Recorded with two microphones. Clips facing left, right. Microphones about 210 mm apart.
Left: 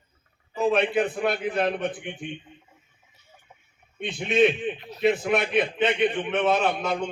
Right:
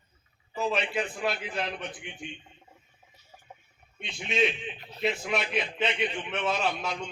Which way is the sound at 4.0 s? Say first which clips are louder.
Left 8 dB; 55° left (ahead or behind).